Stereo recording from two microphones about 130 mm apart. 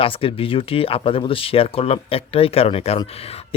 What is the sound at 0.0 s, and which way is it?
Speech, 45° left (ahead or behind).